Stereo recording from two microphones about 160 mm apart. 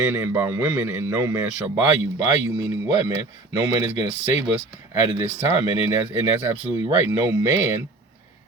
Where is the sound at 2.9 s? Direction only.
15° right (ahead or behind).